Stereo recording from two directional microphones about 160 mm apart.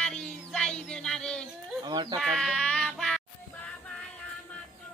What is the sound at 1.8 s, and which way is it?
Speech, 30° right (ahead or behind).